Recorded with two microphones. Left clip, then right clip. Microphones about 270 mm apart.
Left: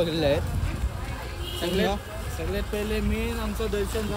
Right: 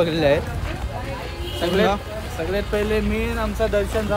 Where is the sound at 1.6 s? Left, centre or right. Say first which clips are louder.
Right 7 dB; centre.